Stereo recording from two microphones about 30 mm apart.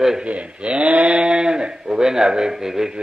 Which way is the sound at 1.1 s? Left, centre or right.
Right.